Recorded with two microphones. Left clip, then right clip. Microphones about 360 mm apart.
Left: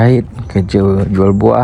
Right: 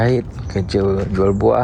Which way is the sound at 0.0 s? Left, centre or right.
Left.